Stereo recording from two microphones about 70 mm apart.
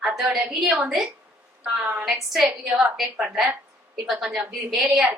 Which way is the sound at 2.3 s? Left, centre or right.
Centre.